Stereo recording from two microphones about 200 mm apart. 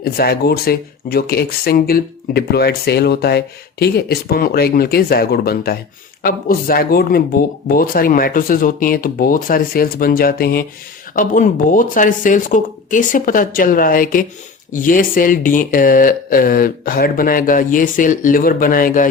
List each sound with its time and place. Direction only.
0.0 s speech: 50° left (ahead or behind)